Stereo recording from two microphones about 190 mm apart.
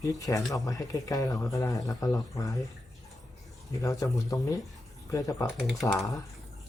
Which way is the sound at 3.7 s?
15° left (ahead or behind).